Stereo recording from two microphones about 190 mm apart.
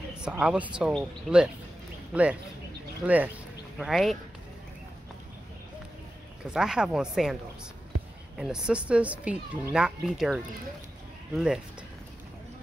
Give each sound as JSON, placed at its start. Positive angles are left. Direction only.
{"t": 0.2, "sound": "a child's voice", "side_deg": -5}
{"t": 3.0, "sound": "a child's voice", "side_deg": -5}
{"t": 6.4, "sound": "a child's voice", "side_deg": -5}
{"t": 8.4, "sound": "a child's voice", "side_deg": -5}